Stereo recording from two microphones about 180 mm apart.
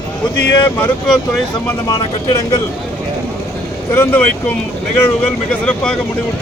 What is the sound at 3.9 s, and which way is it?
Speech, 15° left (ahead or behind).